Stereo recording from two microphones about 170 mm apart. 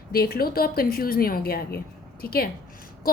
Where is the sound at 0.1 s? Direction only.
60° left (ahead or behind).